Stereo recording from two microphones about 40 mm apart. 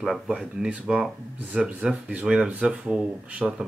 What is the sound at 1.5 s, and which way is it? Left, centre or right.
Speech, right.